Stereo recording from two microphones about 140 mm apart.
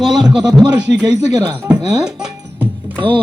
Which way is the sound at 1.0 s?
20° right (ahead or behind).